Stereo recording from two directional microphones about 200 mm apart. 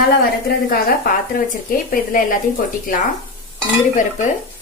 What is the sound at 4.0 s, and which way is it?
Dishes, 40° left (ahead or behind).